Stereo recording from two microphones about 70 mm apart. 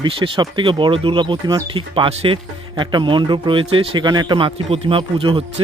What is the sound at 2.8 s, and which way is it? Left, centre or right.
Speech, right.